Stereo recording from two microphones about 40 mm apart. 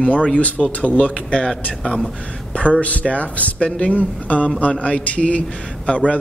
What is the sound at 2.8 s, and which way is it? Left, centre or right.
A man's voice, left.